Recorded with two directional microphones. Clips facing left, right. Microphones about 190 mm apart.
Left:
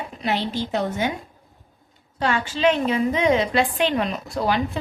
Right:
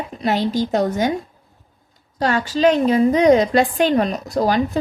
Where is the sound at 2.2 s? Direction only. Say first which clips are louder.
Right 5 dB; 40° right (ahead or behind).